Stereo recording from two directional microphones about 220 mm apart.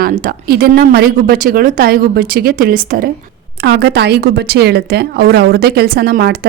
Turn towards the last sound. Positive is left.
turn(degrees=-45)  # may be behind; listen again after turning